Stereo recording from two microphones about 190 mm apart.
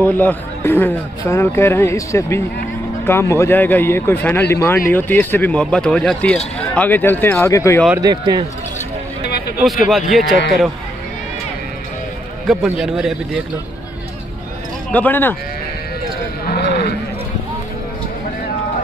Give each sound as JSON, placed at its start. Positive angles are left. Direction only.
{"t": 0.0, "sound": "speech", "side_deg": 10}
{"t": 8.0, "sound": "speech", "side_deg": -20}
{"t": 9.6, "sound": "a man's voice", "side_deg": 0}
{"t": 12.4, "sound": "a man's voice", "side_deg": -5}
{"t": 14.9, "sound": "speech", "side_deg": 10}
{"t": 16.4, "sound": "a sound", "side_deg": 55}